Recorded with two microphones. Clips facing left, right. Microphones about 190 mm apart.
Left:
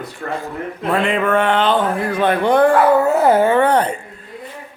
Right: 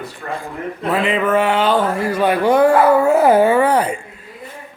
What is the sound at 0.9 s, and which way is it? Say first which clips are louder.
Speech: even; centre (ahead or behind).